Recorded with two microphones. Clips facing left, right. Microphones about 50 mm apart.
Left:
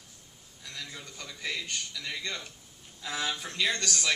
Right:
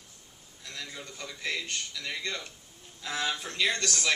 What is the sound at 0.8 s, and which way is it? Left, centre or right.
Speech, centre.